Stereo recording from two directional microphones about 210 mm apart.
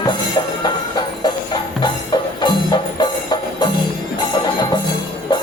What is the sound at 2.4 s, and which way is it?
Music, 20° left (ahead or behind).